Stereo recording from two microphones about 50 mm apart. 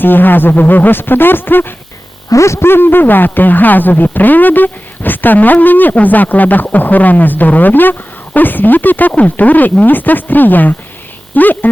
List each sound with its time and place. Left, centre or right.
0.0 s speech: left
2.3 s speech: left
2.6 s speech: left